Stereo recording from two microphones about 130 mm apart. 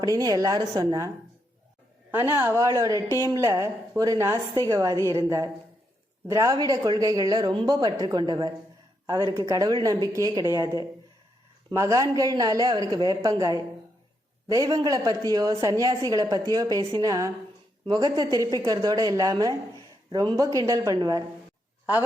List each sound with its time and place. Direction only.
0.0 s a woman's voice: 30° right (ahead or behind)
2.3 s a woman's voice: 20° right (ahead or behind)